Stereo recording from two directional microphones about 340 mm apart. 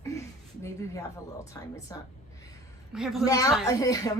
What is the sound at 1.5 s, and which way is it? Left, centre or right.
Speech, centre.